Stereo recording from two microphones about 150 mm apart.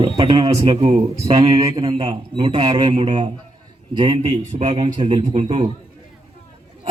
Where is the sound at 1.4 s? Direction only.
25° right (ahead or behind); by 5.7 s 45° right (ahead or behind).